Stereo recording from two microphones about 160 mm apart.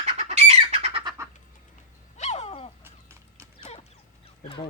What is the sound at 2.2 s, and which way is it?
Dog, 45° left (ahead or behind).